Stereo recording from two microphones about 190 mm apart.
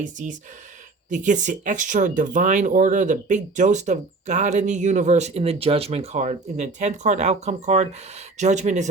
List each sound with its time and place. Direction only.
0.0 s speech: 40° right (ahead or behind)